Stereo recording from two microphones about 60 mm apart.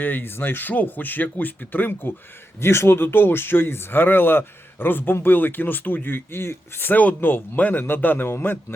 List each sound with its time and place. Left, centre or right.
0.0 s speech: left
2.6 s speech: left